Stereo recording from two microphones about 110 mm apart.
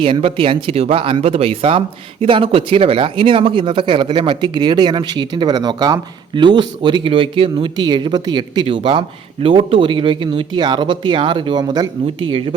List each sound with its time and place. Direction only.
0.0 s speech: 55° right (ahead or behind)